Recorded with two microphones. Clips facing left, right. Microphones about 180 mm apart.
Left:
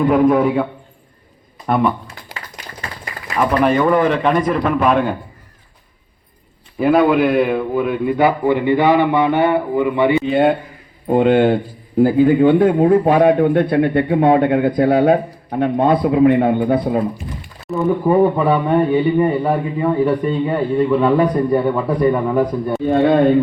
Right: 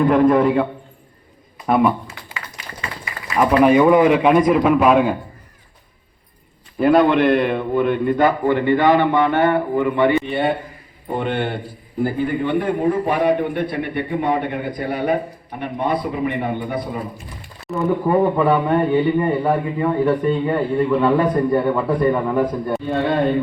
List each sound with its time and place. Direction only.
0.0 s a man's voice: 5° left (ahead or behind)
3.3 s speech: 10° right (ahead or behind)
6.7 s a man's voice: 5° left (ahead or behind)
11.1 s speech: 90° left
13.2 s a man's voice: 55° left (ahead or behind)
15.5 s a man's voice: 85° left; by 17.0 s 60° left (ahead or behind)
17.7 s a man's voice: centre (ahead or behind)
18.1 s a man's voice: 10° left (ahead or behind)